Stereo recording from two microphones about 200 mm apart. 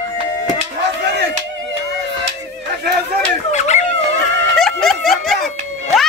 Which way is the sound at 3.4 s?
35° left (ahead or behind).